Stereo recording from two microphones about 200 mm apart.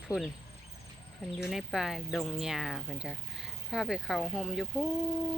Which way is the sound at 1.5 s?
Centre (ahead or behind).